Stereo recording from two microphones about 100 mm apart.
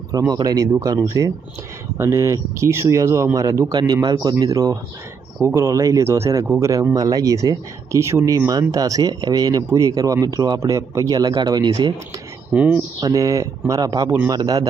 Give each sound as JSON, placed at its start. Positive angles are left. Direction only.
{"t": 0.1, "sound": "speech", "side_deg": -40}
{"t": 12.5, "sound": "speech", "side_deg": -15}
{"t": 13.0, "sound": "speech", "side_deg": -35}